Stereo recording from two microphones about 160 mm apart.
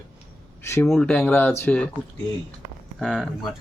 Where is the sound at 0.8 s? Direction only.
5° left (ahead or behind).